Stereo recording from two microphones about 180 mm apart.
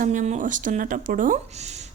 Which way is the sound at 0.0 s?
45° right (ahead or behind).